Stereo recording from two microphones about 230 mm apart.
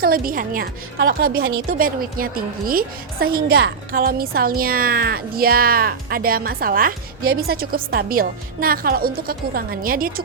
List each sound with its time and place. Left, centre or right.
0.0 s a woman's voice: right